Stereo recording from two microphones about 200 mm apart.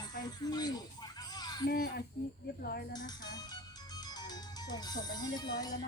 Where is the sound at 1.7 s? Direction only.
50° left (ahead or behind).